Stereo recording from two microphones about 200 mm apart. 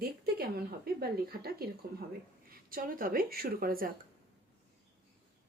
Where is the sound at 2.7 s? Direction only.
45° right (ahead or behind).